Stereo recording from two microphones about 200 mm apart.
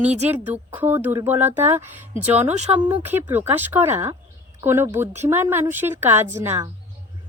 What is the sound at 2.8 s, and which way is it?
A woman's voice, 10° right (ahead or behind).